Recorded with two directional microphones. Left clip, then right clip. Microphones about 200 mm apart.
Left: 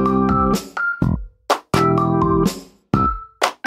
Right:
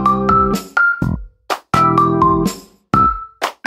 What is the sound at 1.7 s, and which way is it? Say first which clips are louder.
Music: right 8 dB; centre (ahead or behind).